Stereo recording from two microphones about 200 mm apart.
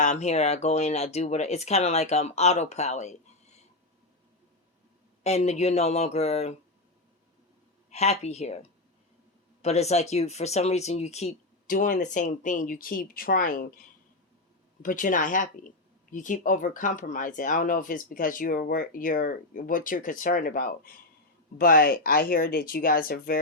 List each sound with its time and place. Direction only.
0.0 s speech: 35° left (ahead or behind)
5.2 s speech: 35° left (ahead or behind)
7.9 s speech: 30° left (ahead or behind)
14.8 s speech: 40° left (ahead or behind)